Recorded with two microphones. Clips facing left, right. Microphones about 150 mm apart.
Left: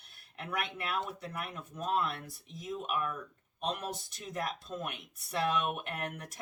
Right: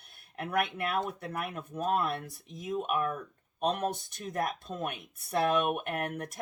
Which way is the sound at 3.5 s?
60° right (ahead or behind).